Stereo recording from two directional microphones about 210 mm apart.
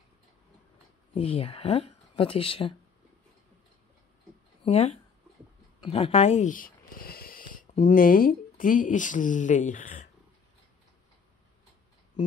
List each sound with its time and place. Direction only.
1.1 s speech: 25° left (ahead or behind)
4.6 s speech: 30° left (ahead or behind)